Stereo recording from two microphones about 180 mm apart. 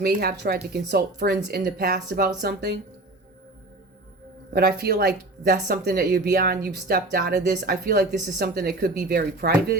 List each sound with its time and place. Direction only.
0.0 s speech: 60° right (ahead or behind)
4.5 s speech: 60° right (ahead or behind)